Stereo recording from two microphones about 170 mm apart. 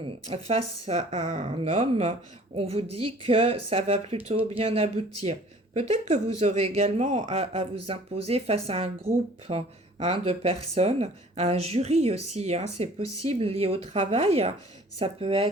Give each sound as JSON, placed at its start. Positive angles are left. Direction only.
{"t": 0.0, "sound": "speech", "side_deg": -35}